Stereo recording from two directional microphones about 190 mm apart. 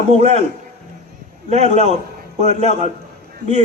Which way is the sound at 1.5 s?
35° right (ahead or behind).